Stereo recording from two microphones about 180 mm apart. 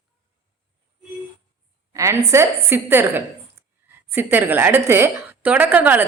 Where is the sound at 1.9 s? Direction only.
15° right (ahead or behind).